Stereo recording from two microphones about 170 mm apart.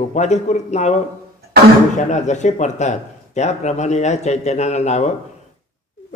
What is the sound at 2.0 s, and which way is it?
Speech, 45° left (ahead or behind).